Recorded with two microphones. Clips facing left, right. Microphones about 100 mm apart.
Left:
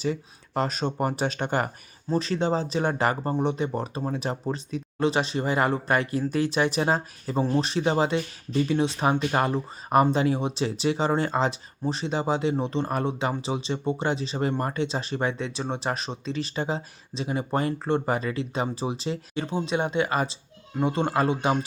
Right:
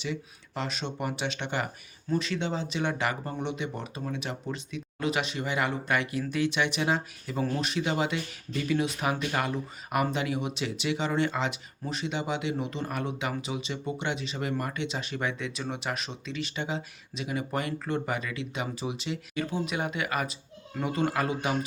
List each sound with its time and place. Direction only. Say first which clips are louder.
0.0 s speech: left 6 dB; 40° left (ahead or behind)